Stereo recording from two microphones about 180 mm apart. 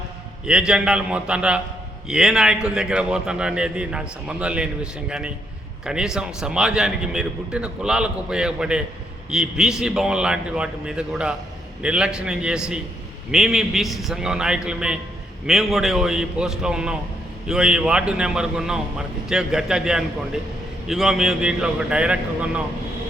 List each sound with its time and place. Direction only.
0.4 s a man's voice: 5° right (ahead or behind)